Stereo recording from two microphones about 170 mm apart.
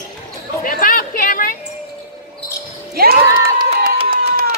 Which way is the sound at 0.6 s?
55° left (ahead or behind).